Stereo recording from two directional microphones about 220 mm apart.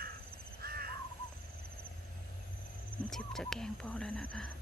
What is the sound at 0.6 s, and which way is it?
Crow, 45° right (ahead or behind).